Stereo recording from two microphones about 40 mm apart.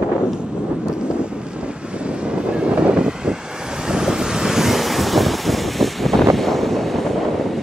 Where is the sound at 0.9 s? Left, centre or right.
Right.